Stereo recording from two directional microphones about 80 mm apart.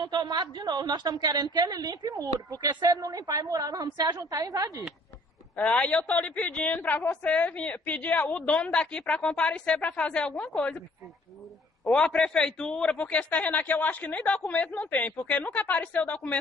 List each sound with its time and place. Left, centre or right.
0.0 s a woman's voice: right
5.6 s a man's voice: centre
11.8 s a man's voice: centre